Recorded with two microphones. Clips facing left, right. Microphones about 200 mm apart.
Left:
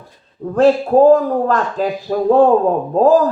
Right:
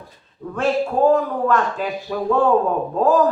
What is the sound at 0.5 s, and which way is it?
Speech, 35° left (ahead or behind).